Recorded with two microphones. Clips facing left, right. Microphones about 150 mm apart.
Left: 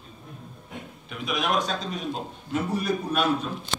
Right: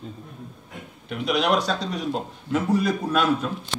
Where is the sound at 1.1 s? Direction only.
70° right (ahead or behind); by 3.2 s 90° right.